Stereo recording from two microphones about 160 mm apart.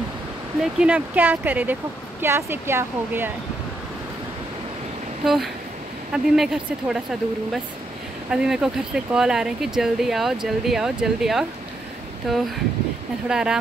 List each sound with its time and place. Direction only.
0.6 s speech: 5° right (ahead or behind)
5.2 s speech: centre (ahead or behind)